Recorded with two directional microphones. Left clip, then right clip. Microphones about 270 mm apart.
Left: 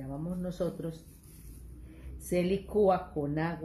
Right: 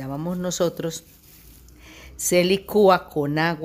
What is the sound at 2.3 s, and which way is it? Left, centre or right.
Speech, right.